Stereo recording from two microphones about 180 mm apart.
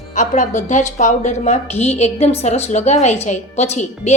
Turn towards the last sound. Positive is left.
turn(degrees=40)  # may be behind; listen again after turning